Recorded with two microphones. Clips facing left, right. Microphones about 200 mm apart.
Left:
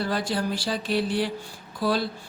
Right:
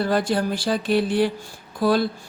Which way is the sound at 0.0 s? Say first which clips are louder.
Right 5 dB; 50° right (ahead or behind).